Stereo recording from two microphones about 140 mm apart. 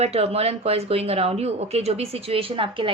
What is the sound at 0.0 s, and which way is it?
Speech, 45° right (ahead or behind).